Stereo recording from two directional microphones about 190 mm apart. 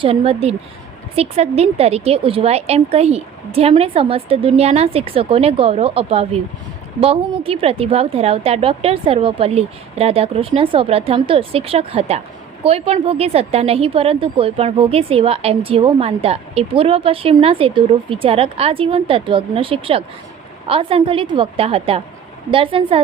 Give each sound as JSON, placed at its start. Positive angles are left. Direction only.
{"t": 0.0, "sound": "a woman's voice", "side_deg": -30}